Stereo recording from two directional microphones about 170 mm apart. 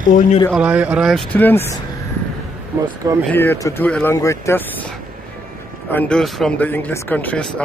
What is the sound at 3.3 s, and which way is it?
Speech, 15° left (ahead or behind).